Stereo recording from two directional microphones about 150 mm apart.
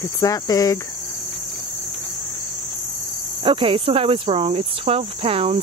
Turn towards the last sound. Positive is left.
turn(degrees=-40)  # may be behind; listen again after turning